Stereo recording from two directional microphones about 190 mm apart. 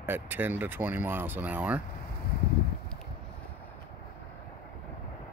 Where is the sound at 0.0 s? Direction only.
10° right (ahead or behind).